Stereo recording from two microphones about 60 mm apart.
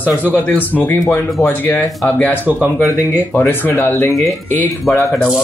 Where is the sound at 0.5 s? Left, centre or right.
Left.